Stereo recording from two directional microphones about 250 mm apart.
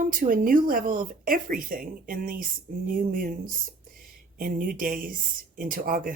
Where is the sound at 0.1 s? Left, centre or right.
Right.